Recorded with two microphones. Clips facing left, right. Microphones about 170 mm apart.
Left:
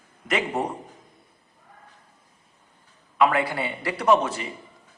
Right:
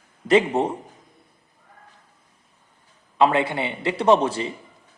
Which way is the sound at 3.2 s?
25° right (ahead or behind).